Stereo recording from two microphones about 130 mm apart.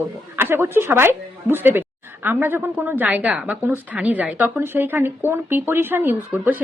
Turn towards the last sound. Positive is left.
turn(degrees=-15)  # may be behind; listen again after turning